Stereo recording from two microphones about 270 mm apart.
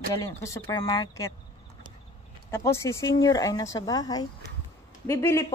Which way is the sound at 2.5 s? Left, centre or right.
Centre.